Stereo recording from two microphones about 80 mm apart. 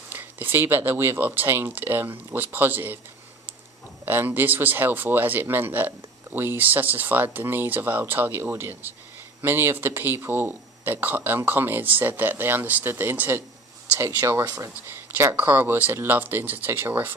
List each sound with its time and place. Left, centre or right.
0.1 s speech: right
4.0 s speech: right
13.9 s speech: right